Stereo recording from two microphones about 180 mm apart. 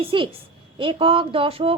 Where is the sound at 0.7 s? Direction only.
30° right (ahead or behind).